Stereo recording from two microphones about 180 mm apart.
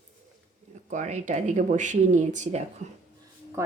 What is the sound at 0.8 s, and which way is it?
Speech, 40° right (ahead or behind).